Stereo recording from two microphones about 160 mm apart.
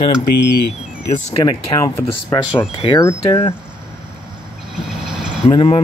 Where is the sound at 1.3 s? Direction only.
25° left (ahead or behind).